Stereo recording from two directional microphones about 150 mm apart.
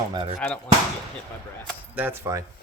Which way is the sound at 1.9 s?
15° right (ahead or behind).